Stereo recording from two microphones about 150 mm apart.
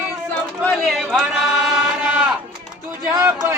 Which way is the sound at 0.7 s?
Centre (ahead or behind).